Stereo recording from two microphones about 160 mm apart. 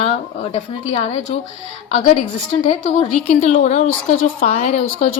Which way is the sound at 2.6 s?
45° left (ahead or behind).